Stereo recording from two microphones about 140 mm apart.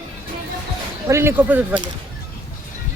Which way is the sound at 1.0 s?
20° right (ahead or behind).